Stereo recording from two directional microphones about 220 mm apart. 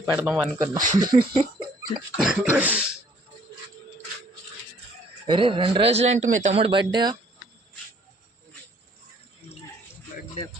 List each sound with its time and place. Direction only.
0.2 s speech: 5° right (ahead or behind)
2.1 s speech: 5° right (ahead or behind)
5.2 s speech: 25° right (ahead or behind)